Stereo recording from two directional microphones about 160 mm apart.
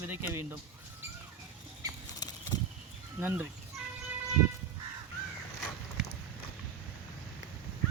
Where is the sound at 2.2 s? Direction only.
25° left (ahead or behind).